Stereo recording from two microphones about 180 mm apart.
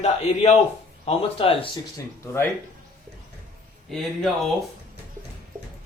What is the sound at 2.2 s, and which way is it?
Speech, 15° left (ahead or behind).